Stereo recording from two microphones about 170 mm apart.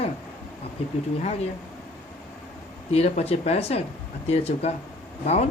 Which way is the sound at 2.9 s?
35° left (ahead or behind).